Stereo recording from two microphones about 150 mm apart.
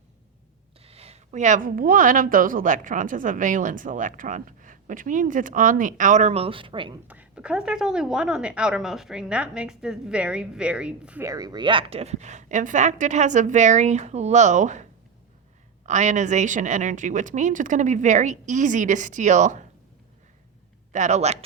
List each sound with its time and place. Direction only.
0.9 s a woman's voice: 45° right (ahead or behind)
7.1 s a woman's voice: 10° right (ahead or behind)
11.2 s speech: 25° right (ahead or behind); by 14.8 s 55° right (ahead or behind)
15.9 s a woman's voice: 55° right (ahead or behind)
20.9 s speech: 50° right (ahead or behind)